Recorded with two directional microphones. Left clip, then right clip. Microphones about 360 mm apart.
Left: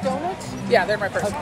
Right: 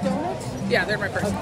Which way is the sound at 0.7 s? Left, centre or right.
Centre.